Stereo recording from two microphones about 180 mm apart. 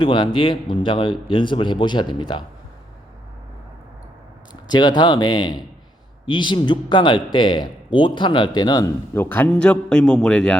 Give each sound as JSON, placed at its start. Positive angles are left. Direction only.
{"t": 0.0, "sound": "speech", "side_deg": 25}
{"t": 4.7, "sound": "speech", "side_deg": 25}
{"t": 9.1, "sound": "a man's voice", "side_deg": 10}